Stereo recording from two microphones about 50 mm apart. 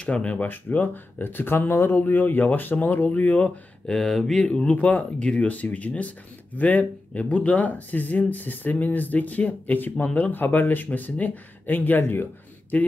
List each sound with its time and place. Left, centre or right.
0.0 s speech: left
2.0 s speech: left
3.8 s speech: centre
4.4 s speech: centre
4.6 s speech: left
12.7 s speech: left